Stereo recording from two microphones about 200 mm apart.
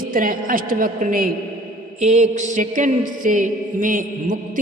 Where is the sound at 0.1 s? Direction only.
45° right (ahead or behind).